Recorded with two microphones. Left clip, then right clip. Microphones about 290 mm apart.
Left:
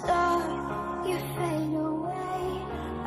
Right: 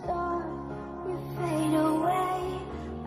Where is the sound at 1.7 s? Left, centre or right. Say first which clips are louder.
Right 4 dB; right.